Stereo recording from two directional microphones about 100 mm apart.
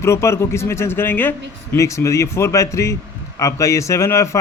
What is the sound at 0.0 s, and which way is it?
Speech, 25° left (ahead or behind).